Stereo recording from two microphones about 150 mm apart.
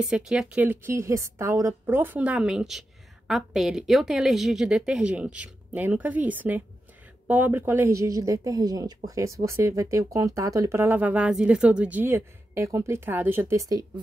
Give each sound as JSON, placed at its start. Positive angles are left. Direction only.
{"t": 0.0, "sound": "a woman's voice", "side_deg": -5}